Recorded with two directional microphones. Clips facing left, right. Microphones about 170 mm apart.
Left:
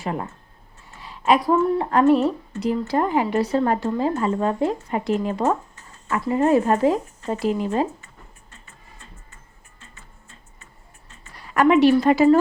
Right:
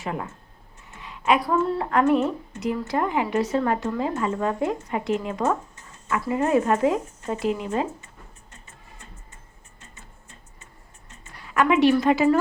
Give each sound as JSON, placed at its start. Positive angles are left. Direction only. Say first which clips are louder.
{"t": 0.0, "sound": "a woman's voice", "louder": "left 3 dB", "side_deg": 35}
{"t": 11.5, "sound": "a woman's voice", "louder": "left 3 dB", "side_deg": 35}